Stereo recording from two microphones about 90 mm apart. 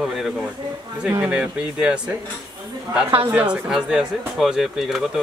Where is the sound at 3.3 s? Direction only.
15° right (ahead or behind).